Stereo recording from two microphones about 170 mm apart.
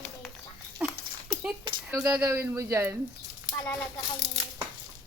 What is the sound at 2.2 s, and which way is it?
Speech, 15° right (ahead or behind).